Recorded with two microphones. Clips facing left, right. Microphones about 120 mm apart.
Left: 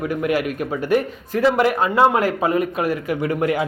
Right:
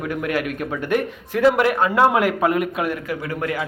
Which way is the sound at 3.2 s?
25° left (ahead or behind).